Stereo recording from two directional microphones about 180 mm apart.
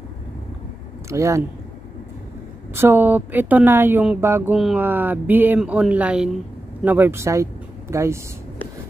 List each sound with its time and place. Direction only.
1.0 s speech: 15° right (ahead or behind)
2.7 s speech: 10° right (ahead or behind)